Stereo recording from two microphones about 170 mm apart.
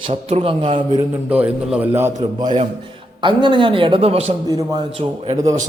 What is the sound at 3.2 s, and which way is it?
A man's voice, 25° right (ahead or behind).